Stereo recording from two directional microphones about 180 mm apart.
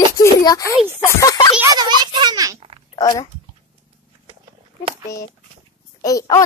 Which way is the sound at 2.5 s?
30° right (ahead or behind).